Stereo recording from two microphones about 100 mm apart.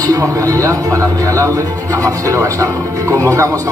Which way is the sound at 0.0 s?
35° right (ahead or behind).